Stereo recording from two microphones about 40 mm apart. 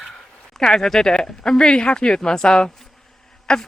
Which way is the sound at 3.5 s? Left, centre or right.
Centre.